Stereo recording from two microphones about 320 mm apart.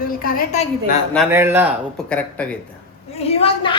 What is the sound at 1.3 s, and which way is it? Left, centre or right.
Speech, centre.